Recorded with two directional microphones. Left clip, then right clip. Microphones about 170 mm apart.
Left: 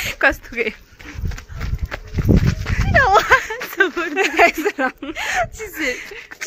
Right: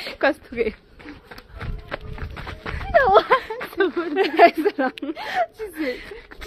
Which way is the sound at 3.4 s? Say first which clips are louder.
Left 5 dB; 15° left (ahead or behind).